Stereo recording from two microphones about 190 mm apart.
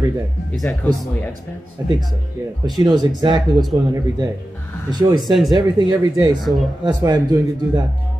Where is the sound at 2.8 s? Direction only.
20° right (ahead or behind).